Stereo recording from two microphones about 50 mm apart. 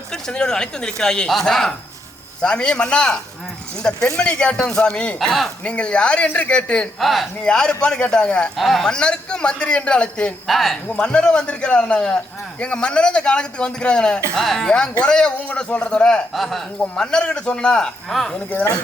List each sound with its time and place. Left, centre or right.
0.1 s a man's voice: centre
7.0 s speech: centre
7.4 s a man's voice: centre
8.5 s speech: centre
8.9 s a man's voice: centre
10.4 s speech: centre
10.8 s a man's voice: centre
14.3 s speech: centre
14.8 s a man's voice: centre
16.3 s speech: centre
16.9 s speech: centre
18.1 s speech: centre